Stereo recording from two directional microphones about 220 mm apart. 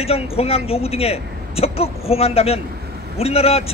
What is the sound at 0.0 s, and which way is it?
Speech, 25° left (ahead or behind).